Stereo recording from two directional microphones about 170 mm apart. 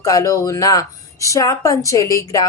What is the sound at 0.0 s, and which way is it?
A woman's voice, 20° left (ahead or behind).